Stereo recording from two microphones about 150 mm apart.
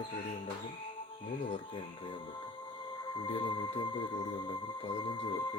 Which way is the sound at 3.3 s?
35° left (ahead or behind).